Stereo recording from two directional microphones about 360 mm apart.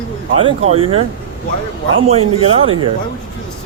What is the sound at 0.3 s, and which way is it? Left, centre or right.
Speech, centre.